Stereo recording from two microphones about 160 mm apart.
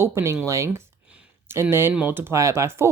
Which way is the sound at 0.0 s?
15° right (ahead or behind).